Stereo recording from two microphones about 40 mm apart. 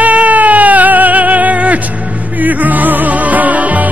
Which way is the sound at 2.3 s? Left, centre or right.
Right.